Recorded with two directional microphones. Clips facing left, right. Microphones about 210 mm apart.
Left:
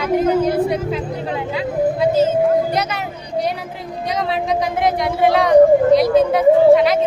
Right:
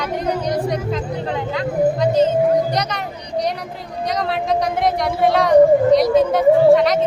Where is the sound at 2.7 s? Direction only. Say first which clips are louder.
Left 1 dB; 5° left (ahead or behind).